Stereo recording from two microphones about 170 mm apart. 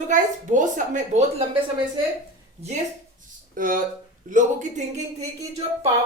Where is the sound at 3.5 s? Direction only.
55° right (ahead or behind).